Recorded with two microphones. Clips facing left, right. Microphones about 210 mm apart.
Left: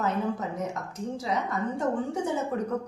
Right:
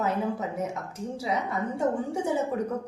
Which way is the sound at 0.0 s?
10° right (ahead or behind).